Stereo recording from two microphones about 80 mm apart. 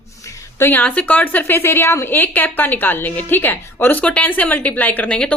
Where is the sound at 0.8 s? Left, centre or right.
Centre.